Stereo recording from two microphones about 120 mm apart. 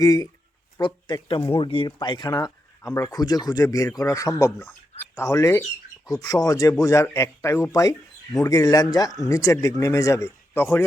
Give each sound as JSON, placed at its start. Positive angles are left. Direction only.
{"t": 0.0, "sound": "speech", "side_deg": 30}